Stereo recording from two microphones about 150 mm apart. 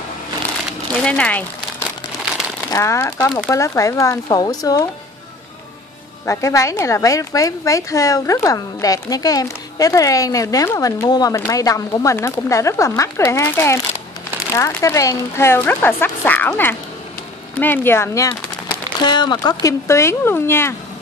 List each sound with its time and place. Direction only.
1.0 s speech: 10° left (ahead or behind)
1.8 s crumpling: 5° right (ahead or behind)
2.7 s a woman's voice: 20° left (ahead or behind)
6.2 s a woman's voice: 20° left (ahead or behind)
18.9 s a woman's voice: 30° left (ahead or behind)